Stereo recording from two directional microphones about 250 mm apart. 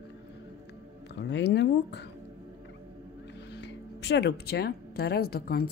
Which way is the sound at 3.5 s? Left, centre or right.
Left.